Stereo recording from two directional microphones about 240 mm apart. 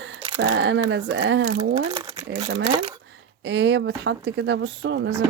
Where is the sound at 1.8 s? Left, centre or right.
Right.